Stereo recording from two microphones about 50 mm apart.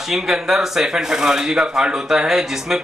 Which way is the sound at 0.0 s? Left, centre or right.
Centre.